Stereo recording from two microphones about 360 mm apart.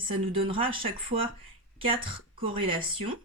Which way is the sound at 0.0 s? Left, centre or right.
Centre.